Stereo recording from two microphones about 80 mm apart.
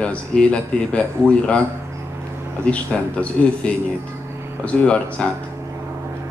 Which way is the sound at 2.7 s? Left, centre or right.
Centre.